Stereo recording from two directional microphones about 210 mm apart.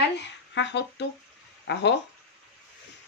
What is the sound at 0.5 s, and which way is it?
Speech, 55° left (ahead or behind).